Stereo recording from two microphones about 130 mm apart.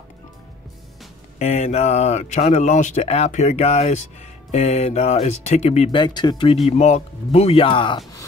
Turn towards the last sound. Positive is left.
turn(degrees=40)  # may be behind; listen again after turning